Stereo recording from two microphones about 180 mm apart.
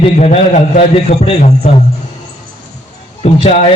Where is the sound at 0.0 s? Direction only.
35° left (ahead or behind).